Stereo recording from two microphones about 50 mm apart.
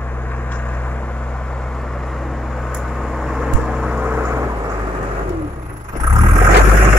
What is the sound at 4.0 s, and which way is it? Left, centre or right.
Vehicle, right.